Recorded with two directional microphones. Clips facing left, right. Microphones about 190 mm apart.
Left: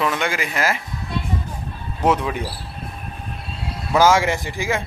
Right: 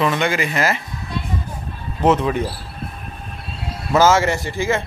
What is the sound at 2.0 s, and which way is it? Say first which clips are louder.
Speech: right 3 dB; 10° left (ahead or behind).